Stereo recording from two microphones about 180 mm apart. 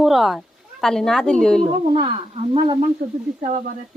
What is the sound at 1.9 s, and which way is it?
Speech, 30° right (ahead or behind).